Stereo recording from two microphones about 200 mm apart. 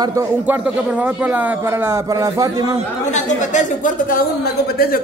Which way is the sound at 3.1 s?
40° left (ahead or behind).